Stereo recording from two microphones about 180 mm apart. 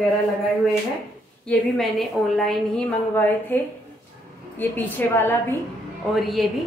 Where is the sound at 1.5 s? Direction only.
Centre (ahead or behind).